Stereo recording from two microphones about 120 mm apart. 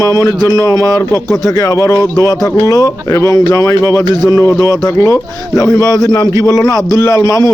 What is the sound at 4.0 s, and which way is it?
Speech, 35° right (ahead or behind).